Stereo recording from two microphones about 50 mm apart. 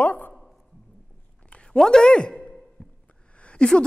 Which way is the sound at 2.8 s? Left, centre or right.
Centre.